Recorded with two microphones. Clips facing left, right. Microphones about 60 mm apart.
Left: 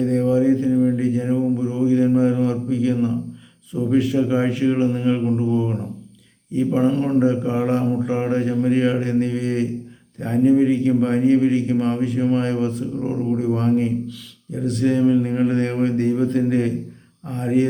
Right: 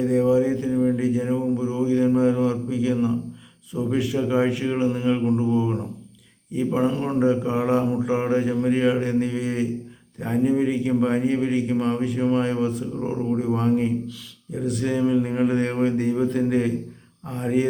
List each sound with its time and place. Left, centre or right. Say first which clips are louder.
0.0 s a man's voice: left 1 dB; centre